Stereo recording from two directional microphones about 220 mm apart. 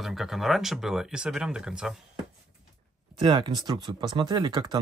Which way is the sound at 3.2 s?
20° right (ahead or behind).